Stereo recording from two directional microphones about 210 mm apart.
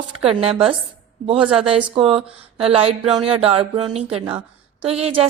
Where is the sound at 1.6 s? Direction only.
25° right (ahead or behind).